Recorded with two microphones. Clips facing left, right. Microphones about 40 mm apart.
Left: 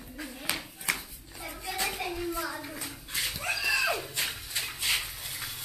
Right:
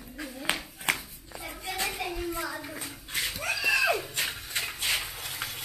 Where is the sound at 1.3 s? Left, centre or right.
Centre.